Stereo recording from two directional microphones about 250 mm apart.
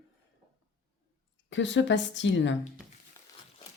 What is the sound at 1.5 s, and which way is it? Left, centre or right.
A woman's voice, left.